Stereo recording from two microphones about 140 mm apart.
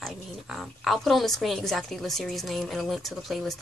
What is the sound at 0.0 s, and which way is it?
Speech, centre (ahead or behind).